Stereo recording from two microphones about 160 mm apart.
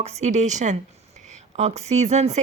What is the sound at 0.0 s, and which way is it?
A woman's voice, 45° right (ahead or behind).